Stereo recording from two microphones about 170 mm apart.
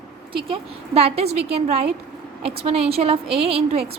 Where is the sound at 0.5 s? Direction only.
35° right (ahead or behind).